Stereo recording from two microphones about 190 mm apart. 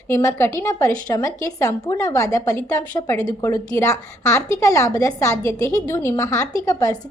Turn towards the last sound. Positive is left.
turn(degrees=20)  # may be behind; listen again after turning